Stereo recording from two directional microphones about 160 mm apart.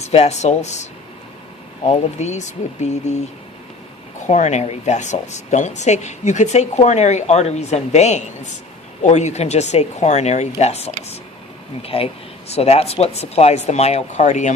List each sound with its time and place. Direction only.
0.0 s a woman's voice: 40° left (ahead or behind)
1.9 s a woman's voice: 45° left (ahead or behind)
4.3 s a woman's voice: 45° left (ahead or behind)